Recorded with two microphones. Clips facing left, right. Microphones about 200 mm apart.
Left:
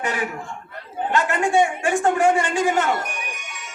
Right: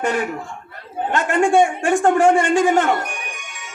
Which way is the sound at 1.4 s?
55° right (ahead or behind).